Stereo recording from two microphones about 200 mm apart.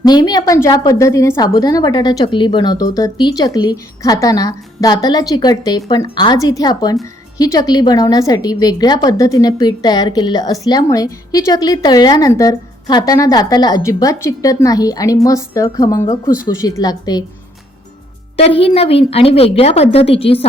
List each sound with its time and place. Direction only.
0.0 s a woman's voice: 20° left (ahead or behind)
18.3 s a woman's voice: 30° left (ahead or behind)